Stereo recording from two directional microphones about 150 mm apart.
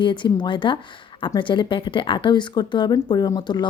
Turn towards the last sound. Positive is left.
turn(degrees=30)  # may be behind; listen again after turning